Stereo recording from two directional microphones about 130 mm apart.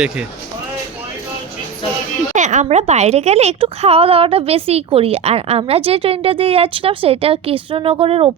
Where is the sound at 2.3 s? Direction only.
70° right (ahead or behind); by 8.3 s 45° right (ahead or behind).